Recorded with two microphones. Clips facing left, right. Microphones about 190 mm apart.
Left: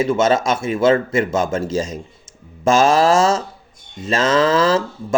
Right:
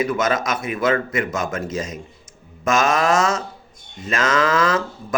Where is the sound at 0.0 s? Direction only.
25° left (ahead or behind).